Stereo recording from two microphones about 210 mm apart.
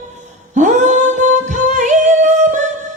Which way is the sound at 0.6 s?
35° right (ahead or behind).